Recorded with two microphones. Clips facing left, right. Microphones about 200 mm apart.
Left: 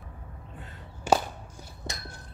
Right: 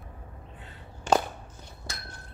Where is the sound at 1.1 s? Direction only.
10° left (ahead or behind).